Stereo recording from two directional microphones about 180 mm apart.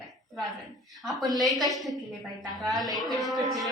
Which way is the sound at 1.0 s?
Centre (ahead or behind).